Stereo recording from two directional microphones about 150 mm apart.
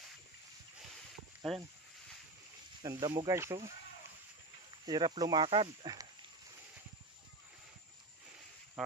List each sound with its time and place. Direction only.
1.4 s speech: centre (ahead or behind)
2.8 s speech: 25° right (ahead or behind)
4.8 s speech: 30° right (ahead or behind)
8.8 s music: centre (ahead or behind)